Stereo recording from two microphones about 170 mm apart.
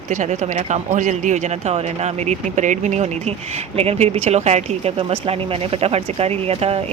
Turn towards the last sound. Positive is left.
turn(degrees=-35)  # may be behind; listen again after turning